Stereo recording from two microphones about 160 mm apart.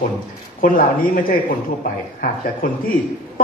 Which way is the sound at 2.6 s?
60° left (ahead or behind).